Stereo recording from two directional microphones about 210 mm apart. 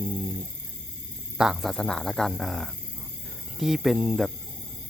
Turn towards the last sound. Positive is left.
turn(degrees=0)  # may be behind; listen again after turning